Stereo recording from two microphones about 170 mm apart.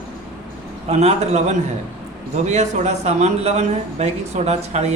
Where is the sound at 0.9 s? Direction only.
40° right (ahead or behind).